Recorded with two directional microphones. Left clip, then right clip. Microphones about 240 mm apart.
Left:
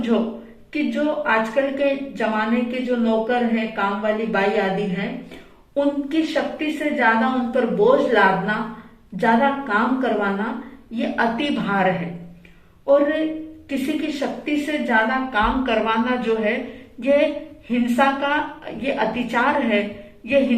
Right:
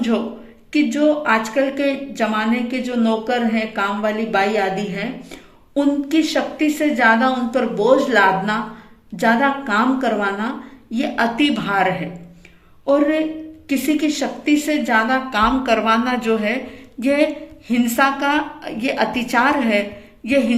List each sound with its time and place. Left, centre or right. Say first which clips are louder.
0.7 s a woman's voice: right 6 dB; right